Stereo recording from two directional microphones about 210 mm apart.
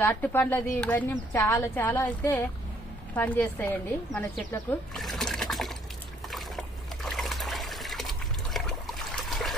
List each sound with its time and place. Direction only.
0.0 s speech: 10° left (ahead or behind)
6.3 s trickle: centre (ahead or behind)